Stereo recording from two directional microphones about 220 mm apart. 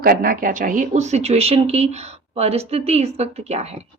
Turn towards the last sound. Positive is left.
turn(degrees=-30)  # may be behind; listen again after turning